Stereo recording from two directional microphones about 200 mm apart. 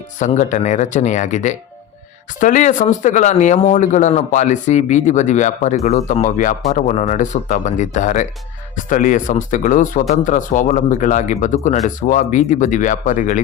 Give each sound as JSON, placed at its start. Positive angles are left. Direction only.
{"t": 0.2, "sound": "speech", "side_deg": 40}